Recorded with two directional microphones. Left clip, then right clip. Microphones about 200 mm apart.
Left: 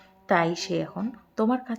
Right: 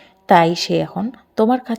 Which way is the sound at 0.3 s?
30° right (ahead or behind).